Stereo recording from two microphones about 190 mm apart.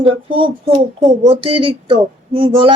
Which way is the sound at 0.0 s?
30° right (ahead or behind).